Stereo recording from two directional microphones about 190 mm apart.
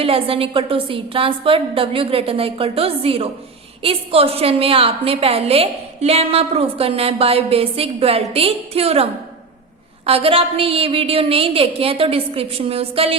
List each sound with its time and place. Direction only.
0.0 s a woman's voice: 30° right (ahead or behind)
10.1 s a woman's voice: 30° right (ahead or behind)